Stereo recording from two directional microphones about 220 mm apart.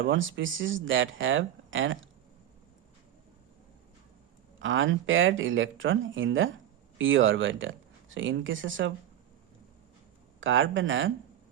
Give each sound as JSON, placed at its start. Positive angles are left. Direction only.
{"t": 0.1, "sound": "speech", "side_deg": -60}
{"t": 4.6, "sound": "speech", "side_deg": -60}
{"t": 10.4, "sound": "speech", "side_deg": -60}